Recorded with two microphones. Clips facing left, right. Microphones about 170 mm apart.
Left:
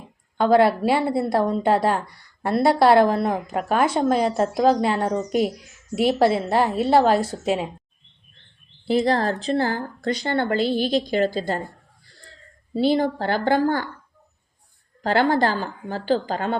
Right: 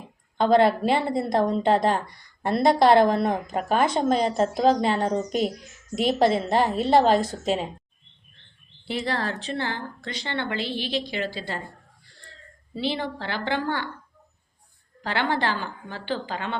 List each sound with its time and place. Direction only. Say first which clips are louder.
0.3 s speech: left 2 dB; 10° left (ahead or behind)
8.9 s speech: left 8 dB; 40° left (ahead or behind)
12.7 s a woman's voice: left 8 dB; 45° left (ahead or behind)
15.0 s speech: left 6 dB; 40° left (ahead or behind)